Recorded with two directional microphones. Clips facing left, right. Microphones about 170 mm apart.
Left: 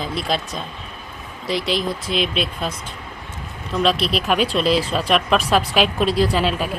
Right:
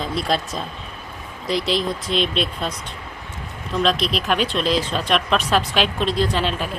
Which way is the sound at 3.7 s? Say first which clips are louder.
Left 1 dB; centre (ahead or behind).